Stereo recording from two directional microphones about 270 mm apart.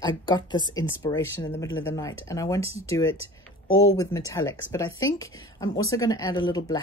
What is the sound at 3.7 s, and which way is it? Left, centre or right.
Speech, centre.